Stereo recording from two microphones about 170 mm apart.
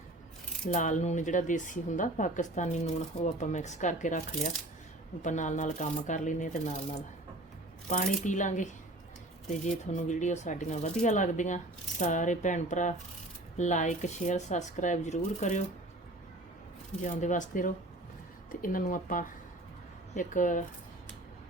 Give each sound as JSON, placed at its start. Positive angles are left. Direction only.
{"t": 0.7, "sound": "speech", "side_deg": 45}
{"t": 17.0, "sound": "speech", "side_deg": 45}